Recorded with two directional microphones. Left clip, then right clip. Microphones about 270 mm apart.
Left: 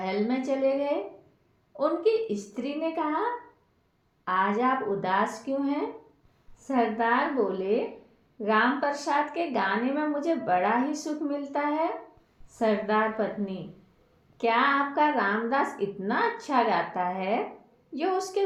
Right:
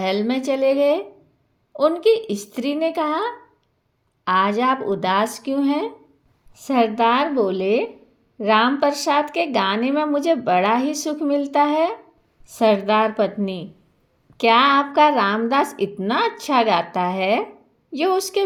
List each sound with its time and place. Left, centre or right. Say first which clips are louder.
0.0 s a woman's voice: right 7 dB; right